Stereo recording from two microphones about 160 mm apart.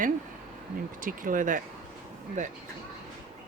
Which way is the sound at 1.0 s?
55° right (ahead or behind).